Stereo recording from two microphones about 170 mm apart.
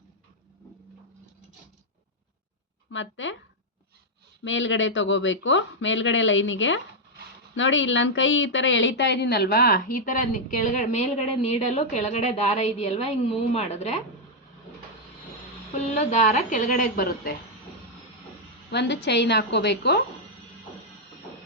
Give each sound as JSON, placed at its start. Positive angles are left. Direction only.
{"t": 2.9, "sound": "speech", "side_deg": 90}
{"t": 4.4, "sound": "a woman's voice", "side_deg": 90}
{"t": 16.0, "sound": "a woman's voice", "side_deg": 45}
{"t": 18.7, "sound": "a woman's voice", "side_deg": 85}